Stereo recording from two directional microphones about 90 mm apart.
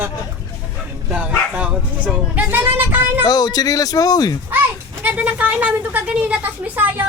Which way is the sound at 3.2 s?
45° left (ahead or behind).